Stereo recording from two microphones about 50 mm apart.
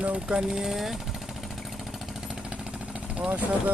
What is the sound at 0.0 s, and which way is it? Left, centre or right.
Speech, right.